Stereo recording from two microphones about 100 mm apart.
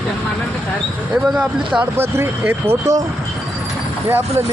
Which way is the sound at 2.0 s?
25° right (ahead or behind).